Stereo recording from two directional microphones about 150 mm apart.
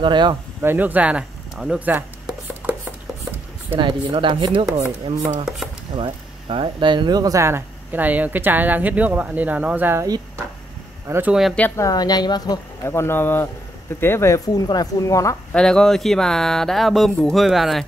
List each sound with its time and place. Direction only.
0.0 s speech: 30° right (ahead or behind)
0.6 s a sound: 15° right (ahead or behind)
3.7 s speech: 35° right (ahead or behind)
4.7 s speech: 45° right (ahead or behind)
5.9 s speech: 35° right (ahead or behind); by 10.0 s 15° right (ahead or behind)
10.0 s speech: 25° right (ahead or behind)
11.1 s speech: 15° right (ahead or behind)
11.5 s a woman's voice: 10° left (ahead or behind)
11.8 s speech: 25° left (ahead or behind)
15.5 s speech: 5° left (ahead or behind)